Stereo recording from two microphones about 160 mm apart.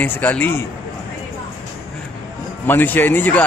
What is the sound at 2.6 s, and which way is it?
Speech, 10° left (ahead or behind).